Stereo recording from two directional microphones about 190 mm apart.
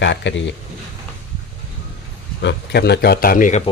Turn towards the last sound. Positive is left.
turn(degrees=45)  # may be behind; listen again after turning